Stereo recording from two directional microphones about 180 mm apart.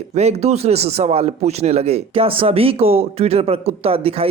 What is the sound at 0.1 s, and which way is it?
Speech, 35° right (ahead or behind).